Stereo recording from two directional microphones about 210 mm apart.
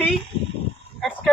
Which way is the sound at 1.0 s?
5° left (ahead or behind).